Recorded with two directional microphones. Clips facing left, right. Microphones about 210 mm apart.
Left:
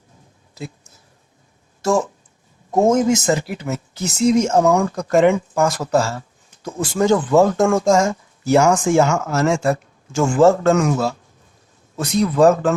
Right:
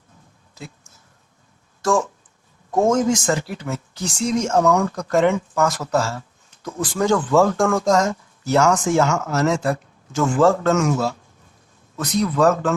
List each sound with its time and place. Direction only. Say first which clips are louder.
1.8 s speech: left 1 dB; 20° left (ahead or behind)
5.0 s speech: left 5 dB; 15° left (ahead or behind)
6.7 s speech: left 3 dB; 25° left (ahead or behind)
7.9 s speech: left 2 dB; 10° left (ahead or behind)
10.2 s speech: left 3 dB; 25° left (ahead or behind)
11.9 s speech: left 3 dB; 30° left (ahead or behind)
12.4 s speech: left 4 dB; 15° left (ahead or behind)